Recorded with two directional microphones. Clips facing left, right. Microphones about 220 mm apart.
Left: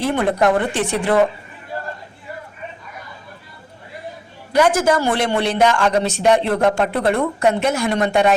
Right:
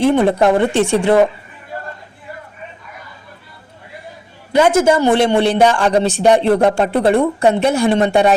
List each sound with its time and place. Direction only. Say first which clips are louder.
0.0 s speech: right 5 dB; 25° right (ahead or behind)
4.5 s a man's voice: right 3 dB; 25° right (ahead or behind)